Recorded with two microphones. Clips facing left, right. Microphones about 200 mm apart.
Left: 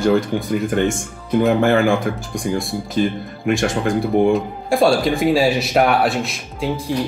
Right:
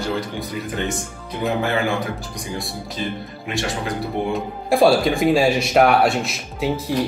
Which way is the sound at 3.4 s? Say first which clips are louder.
Left 7 dB; 50° left (ahead or behind).